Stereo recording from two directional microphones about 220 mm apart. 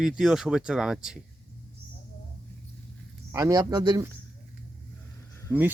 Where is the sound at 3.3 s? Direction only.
15° right (ahead or behind).